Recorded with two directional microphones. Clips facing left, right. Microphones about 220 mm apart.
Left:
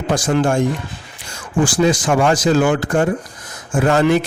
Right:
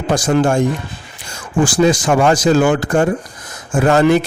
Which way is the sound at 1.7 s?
40° right (ahead or behind).